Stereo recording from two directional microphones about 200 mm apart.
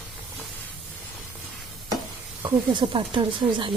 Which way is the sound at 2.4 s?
25° right (ahead or behind).